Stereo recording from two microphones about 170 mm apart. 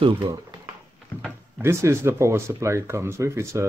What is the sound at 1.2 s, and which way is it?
Speech, 15° right (ahead or behind).